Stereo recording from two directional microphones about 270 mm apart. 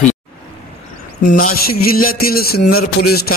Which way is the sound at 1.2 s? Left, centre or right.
Left.